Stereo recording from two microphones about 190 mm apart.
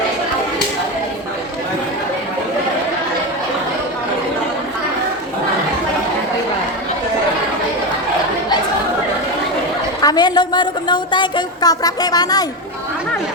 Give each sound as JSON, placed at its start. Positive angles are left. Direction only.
{"t": 10.0, "sound": "a woman's voice", "side_deg": 20}